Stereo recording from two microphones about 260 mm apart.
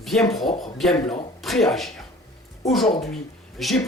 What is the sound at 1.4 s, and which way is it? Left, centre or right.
Speech, centre.